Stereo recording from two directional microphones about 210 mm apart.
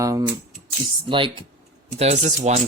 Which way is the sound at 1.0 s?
25° right (ahead or behind).